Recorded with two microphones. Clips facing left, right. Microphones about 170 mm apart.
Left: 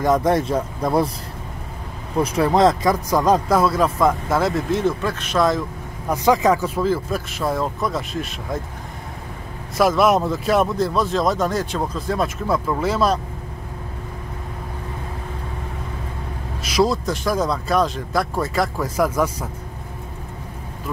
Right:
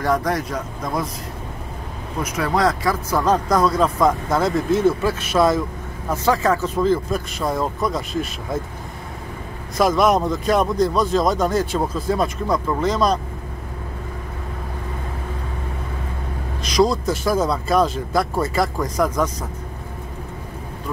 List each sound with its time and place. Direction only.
0.0 s speech: 20° left (ahead or behind)
2.2 s speech: 30° left (ahead or behind); by 5.6 s 5° right (ahead or behind)
6.0 s speech: 15° left (ahead or behind)
9.8 s speech: 5° left (ahead or behind)
16.6 s speech: 5° left (ahead or behind)